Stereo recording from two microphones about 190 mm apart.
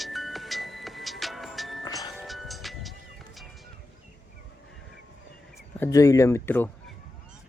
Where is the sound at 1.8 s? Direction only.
20° left (ahead or behind).